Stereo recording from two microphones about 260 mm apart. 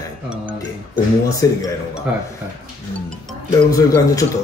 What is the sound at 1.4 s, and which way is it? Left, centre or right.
Speech, centre.